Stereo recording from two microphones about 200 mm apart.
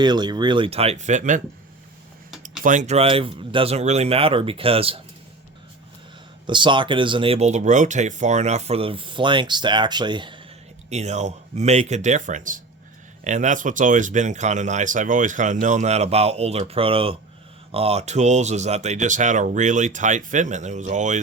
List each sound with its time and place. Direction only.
0.0 s speech: 20° right (ahead or behind); by 1.4 s 40° right (ahead or behind)
2.6 s speech: 35° right (ahead or behind)
6.5 s speech: 25° right (ahead or behind)
10.8 s speech: 35° right (ahead or behind)